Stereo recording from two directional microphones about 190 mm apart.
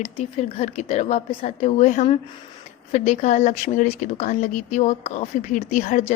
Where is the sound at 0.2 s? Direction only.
35° left (ahead or behind).